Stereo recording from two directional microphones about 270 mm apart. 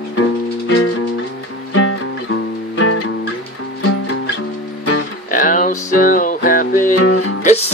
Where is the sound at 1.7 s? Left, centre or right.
Left.